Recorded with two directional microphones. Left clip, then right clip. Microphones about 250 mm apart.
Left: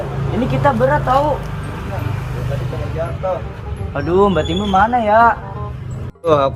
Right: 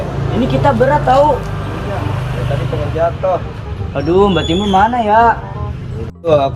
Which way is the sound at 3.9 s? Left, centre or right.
Centre.